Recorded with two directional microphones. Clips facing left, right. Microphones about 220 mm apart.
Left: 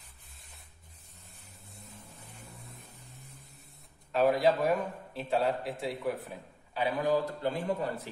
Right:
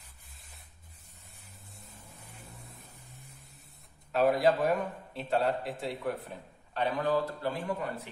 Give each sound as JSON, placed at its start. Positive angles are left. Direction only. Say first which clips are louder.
{"t": 4.1, "sound": "a man's voice", "louder": "even", "side_deg": 0}
{"t": 7.4, "sound": "a man's voice", "louder": "left 2 dB", "side_deg": 20}